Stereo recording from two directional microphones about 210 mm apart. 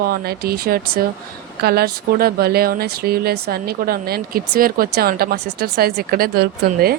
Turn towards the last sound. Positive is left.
turn(degrees=-50)  # may be behind; listen again after turning